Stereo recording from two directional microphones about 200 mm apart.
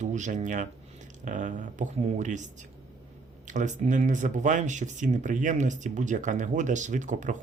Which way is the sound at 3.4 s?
40° right (ahead or behind).